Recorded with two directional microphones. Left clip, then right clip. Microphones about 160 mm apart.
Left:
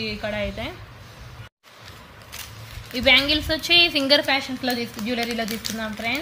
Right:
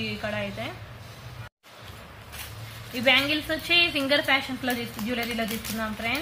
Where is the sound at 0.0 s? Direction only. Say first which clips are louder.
Left 3 dB; 50° left (ahead or behind).